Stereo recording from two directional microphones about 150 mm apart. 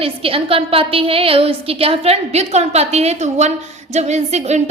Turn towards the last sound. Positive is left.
turn(degrees=-50)  # may be behind; listen again after turning